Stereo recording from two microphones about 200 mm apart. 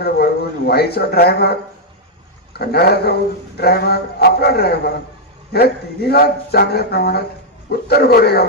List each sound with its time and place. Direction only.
0.0 s speech: 50° left (ahead or behind)
2.6 s speech: 55° left (ahead or behind)